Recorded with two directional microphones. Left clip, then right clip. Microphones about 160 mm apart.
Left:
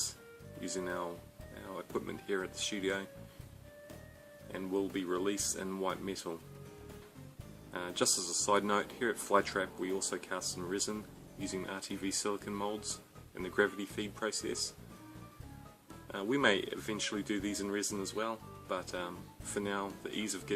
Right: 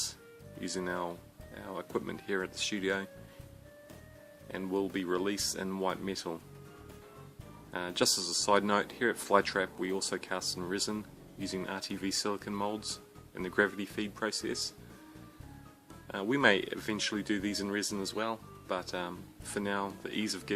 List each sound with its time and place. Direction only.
0.6 s speech: 35° right (ahead or behind)
4.5 s speech: 35° right (ahead or behind)
7.7 s speech: 35° right (ahead or behind)
16.0 s speech: 35° right (ahead or behind)